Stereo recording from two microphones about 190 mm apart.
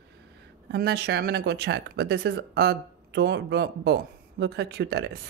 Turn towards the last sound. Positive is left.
turn(degrees=-60)  # may be behind; listen again after turning